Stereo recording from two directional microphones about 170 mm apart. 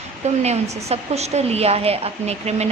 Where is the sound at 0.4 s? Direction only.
40° right (ahead or behind).